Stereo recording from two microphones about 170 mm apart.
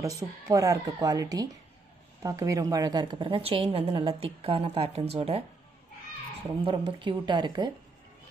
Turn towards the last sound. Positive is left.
turn(degrees=-25)  # may be behind; listen again after turning